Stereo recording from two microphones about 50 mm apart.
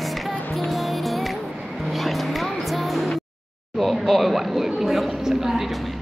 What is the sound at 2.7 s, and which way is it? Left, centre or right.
Music, centre.